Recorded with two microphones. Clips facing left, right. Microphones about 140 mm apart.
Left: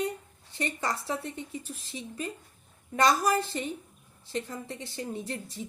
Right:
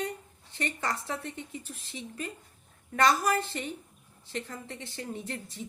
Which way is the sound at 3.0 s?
35° left (ahead or behind).